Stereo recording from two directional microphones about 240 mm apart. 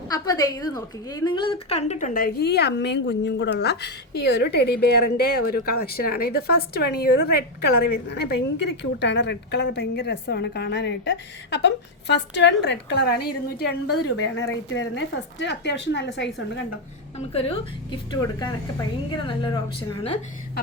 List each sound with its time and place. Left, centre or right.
0.1 s a woman's voice: centre; by 16.3 s left
17.2 s a woman's voice: left